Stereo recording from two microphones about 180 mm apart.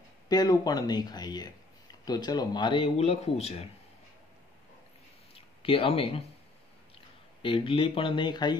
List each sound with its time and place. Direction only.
0.3 s speech: 20° left (ahead or behind)
5.3 s a sound: 30° left (ahead or behind)
7.4 s speech: 30° left (ahead or behind)